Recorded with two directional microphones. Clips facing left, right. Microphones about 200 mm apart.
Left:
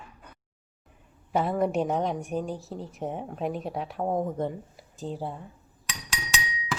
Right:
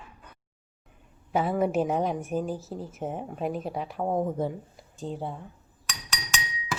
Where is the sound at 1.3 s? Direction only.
Centre (ahead or behind).